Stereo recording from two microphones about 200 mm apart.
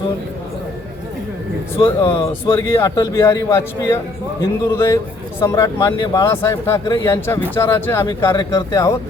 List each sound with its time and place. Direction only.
1.8 s speech: 25° left (ahead or behind)
2.1 s a man's voice: 10° left (ahead or behind)